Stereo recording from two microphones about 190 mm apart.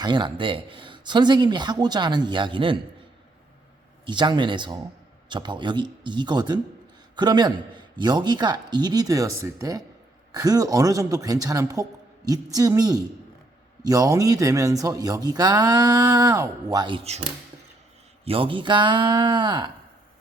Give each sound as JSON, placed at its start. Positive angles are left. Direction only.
{"t": 0.0, "sound": "speech", "side_deg": -25}
{"t": 4.0, "sound": "speech", "side_deg": -25}
{"t": 18.3, "sound": "speech", "side_deg": -25}